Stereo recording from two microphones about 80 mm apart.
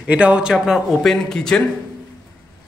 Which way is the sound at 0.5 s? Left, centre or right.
Centre.